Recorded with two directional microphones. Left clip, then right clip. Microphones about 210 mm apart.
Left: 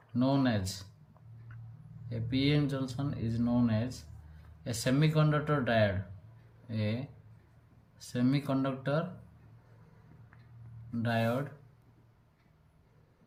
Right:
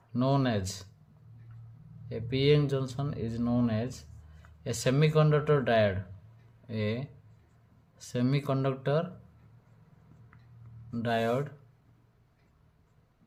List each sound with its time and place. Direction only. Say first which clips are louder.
0.1 s speech: right 1 dB; 45° right (ahead or behind)
2.0 s speech: right 6 dB; 45° right (ahead or behind)
11.0 s speech: right 3 dB; 45° right (ahead or behind)